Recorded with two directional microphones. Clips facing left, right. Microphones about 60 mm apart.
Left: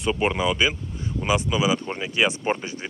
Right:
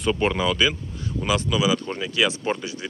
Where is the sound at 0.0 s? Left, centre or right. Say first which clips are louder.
Right 1 dB; centre.